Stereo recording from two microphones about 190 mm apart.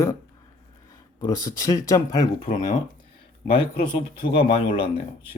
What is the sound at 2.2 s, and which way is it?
Speech, 40° left (ahead or behind).